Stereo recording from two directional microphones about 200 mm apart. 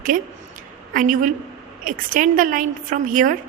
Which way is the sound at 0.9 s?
40° right (ahead or behind).